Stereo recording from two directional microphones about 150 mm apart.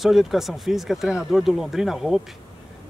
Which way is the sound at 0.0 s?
Centre (ahead or behind).